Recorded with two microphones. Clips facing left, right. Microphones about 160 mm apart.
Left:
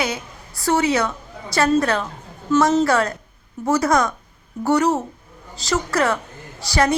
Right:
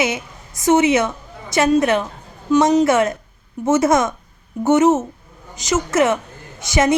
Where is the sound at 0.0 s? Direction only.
20° right (ahead or behind).